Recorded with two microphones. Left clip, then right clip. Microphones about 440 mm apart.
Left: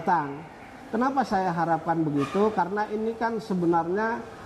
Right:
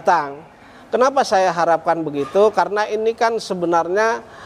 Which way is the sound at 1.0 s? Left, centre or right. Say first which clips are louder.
Right 10 dB; right.